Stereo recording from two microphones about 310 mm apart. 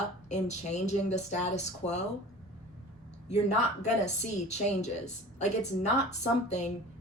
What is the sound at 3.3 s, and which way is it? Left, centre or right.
Speech, left.